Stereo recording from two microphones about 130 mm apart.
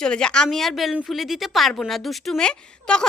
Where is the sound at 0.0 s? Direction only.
5° left (ahead or behind).